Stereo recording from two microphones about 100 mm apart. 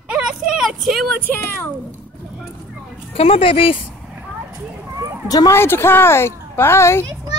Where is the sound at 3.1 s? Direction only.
70° left (ahead or behind).